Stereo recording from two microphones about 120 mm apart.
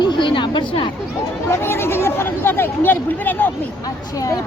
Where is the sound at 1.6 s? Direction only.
20° left (ahead or behind).